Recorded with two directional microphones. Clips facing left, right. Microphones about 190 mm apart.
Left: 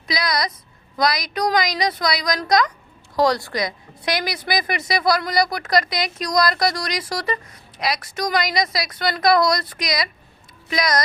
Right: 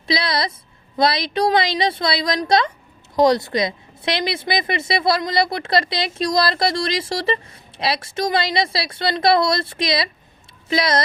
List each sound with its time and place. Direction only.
0.1 s a woman's voice: 30° right (ahead or behind)